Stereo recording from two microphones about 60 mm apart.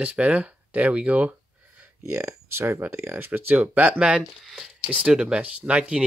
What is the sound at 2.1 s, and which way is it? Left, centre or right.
Speech, right.